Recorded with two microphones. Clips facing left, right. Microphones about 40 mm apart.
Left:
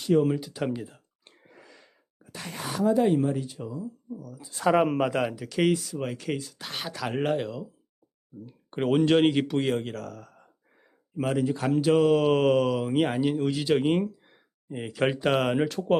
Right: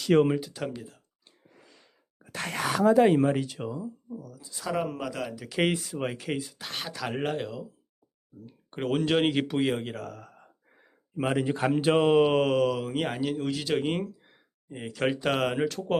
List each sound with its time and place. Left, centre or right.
0.3 s speech: centre
0.8 s clicking: left
1.5 s a sound: left
2.3 s speech: right
4.1 s speech: centre
4.5 s speech: left
5.5 s speech: centre
5.7 s speech: right
6.1 s speech: centre
6.6 s speech: centre
8.7 s speech: centre
11.3 s speech: right
12.4 s speech: centre